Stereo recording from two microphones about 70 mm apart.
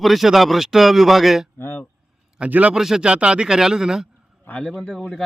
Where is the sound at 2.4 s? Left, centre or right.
Centre.